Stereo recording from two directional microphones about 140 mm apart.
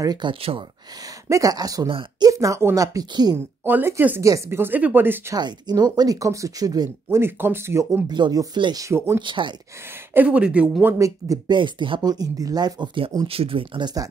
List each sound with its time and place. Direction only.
0.0 s speech: 30° right (ahead or behind)
1.3 s speech: 25° right (ahead or behind)
1.9 s speech: 40° right (ahead or behind)
2.2 s speech: 20° right (ahead or behind)
3.3 s speech: 15° right (ahead or behind)
5.3 s speech: 30° right (ahead or behind)
8.1 s speech: 30° right (ahead or behind)
8.8 s speech: 20° right (ahead or behind)
9.2 s speech: 35° right (ahead or behind)
10.1 s speech: 10° right (ahead or behind); by 14.0 s 30° right (ahead or behind)